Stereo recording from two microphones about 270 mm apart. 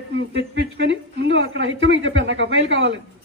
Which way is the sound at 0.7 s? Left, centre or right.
Right.